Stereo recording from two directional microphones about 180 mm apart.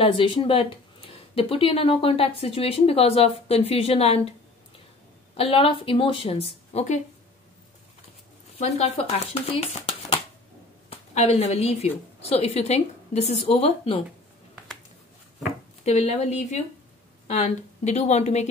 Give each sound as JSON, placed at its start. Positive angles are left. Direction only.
{"t": 0.0, "sound": "speech", "side_deg": 30}
{"t": 5.3, "sound": "speech", "side_deg": 30}
{"t": 8.5, "sound": "a woman's voice", "side_deg": 35}
{"t": 15.8, "sound": "speech", "side_deg": 35}